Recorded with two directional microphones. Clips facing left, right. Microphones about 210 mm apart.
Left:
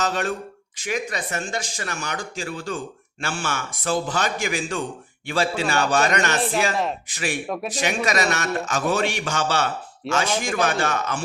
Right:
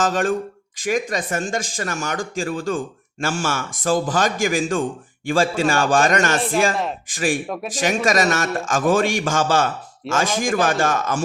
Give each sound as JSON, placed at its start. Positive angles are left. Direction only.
{"t": 0.0, "sound": "speech", "side_deg": -50}
{"t": 7.4, "sound": "speech", "side_deg": 0}
{"t": 7.8, "sound": "speech", "side_deg": -45}